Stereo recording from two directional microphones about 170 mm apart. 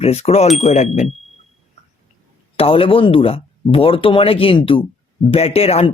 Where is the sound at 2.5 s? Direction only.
35° left (ahead or behind).